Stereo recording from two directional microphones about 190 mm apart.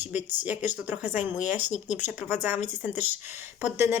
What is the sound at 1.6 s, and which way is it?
Speech, 40° left (ahead or behind).